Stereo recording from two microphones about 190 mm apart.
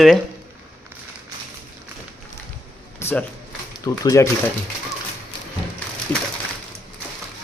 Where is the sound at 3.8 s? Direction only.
15° left (ahead or behind).